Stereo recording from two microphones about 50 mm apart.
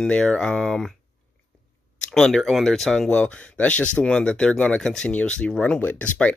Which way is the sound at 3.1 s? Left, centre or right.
Left.